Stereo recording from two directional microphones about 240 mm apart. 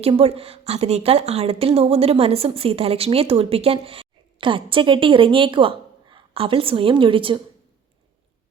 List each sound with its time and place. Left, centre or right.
0.0 s a woman's voice: right